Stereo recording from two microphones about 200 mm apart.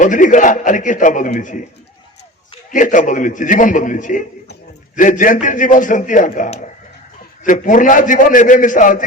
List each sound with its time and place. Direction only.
0.0 s a man's voice: 40° left (ahead or behind)
2.7 s a man's voice: 40° left (ahead or behind)